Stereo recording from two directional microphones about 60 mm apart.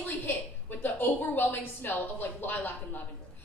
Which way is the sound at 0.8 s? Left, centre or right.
Left.